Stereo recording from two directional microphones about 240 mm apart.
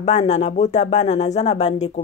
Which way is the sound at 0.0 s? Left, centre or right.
Left.